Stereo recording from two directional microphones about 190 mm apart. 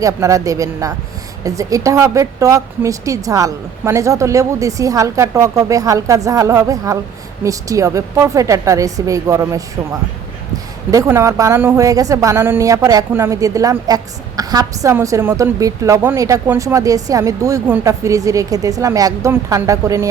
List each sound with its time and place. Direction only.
0.0 s speech: 15° right (ahead or behind)